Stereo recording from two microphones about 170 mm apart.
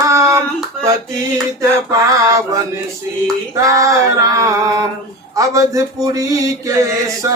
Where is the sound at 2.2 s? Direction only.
20° right (ahead or behind).